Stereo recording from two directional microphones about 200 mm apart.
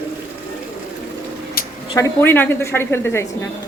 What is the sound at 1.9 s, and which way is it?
A woman's voice, 10° left (ahead or behind).